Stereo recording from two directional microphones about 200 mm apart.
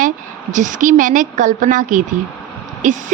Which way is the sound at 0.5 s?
40° right (ahead or behind).